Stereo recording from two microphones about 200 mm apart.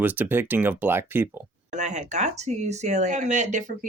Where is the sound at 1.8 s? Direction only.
35° right (ahead or behind).